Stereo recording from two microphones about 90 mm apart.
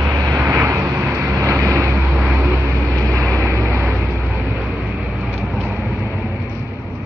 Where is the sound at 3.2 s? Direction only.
35° right (ahead or behind).